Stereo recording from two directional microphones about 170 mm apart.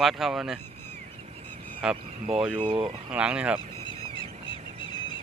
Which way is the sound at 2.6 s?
30° right (ahead or behind).